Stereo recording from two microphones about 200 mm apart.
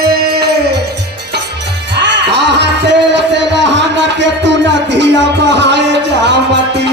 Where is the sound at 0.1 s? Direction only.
50° right (ahead or behind).